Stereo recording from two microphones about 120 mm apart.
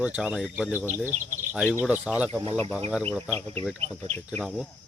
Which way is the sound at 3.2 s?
20° left (ahead or behind).